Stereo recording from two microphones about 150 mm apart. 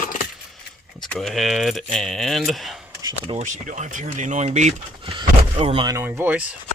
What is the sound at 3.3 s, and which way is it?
Speech, 55° right (ahead or behind).